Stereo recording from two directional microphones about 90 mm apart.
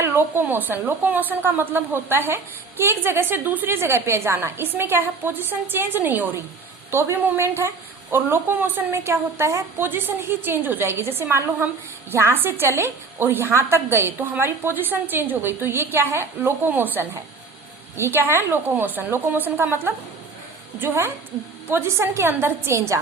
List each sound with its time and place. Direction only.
0.0 s a woman's voice: 25° right (ahead or behind)